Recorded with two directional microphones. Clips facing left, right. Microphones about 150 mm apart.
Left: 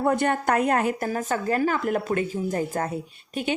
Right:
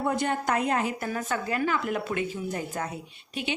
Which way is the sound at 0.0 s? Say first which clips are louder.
Left 4 dB; 55° left (ahead or behind).